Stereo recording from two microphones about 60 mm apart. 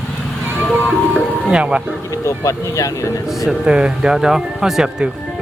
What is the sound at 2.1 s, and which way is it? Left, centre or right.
A man's voice, left.